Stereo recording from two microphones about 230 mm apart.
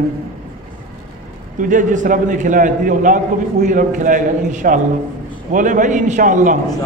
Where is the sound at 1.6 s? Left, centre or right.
Right.